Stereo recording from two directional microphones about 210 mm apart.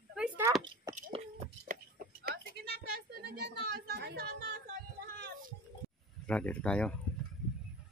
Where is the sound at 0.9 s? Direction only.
35° right (ahead or behind).